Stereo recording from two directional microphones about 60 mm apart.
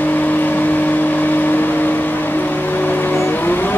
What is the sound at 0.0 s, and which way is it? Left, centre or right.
Vehicle, left.